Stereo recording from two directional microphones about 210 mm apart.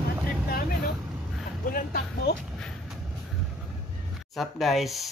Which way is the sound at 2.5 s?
Centre (ahead or behind).